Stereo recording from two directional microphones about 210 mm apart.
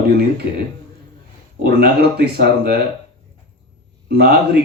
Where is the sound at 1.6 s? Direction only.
50° right (ahead or behind).